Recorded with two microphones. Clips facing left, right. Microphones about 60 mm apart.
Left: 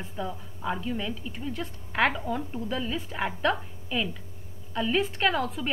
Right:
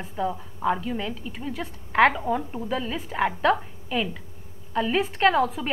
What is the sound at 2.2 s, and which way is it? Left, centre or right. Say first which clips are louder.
A woman's voice: right 4 dB; centre.